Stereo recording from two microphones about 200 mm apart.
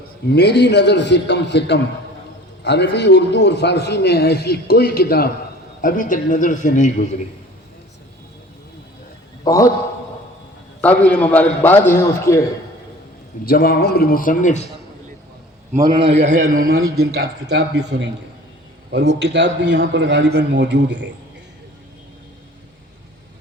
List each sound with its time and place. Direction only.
0.3 s a man's voice: 55° left (ahead or behind); by 7.1 s 35° left (ahead or behind)
9.4 s a man's voice: 15° left (ahead or behind)
10.8 s a man's voice: 5° left (ahead or behind)
13.4 s a man's voice: 50° left (ahead or behind)
15.8 s a man's voice: 25° right (ahead or behind); by 16.7 s 45° right (ahead or behind)
17.0 s a man's voice: 55° right (ahead or behind)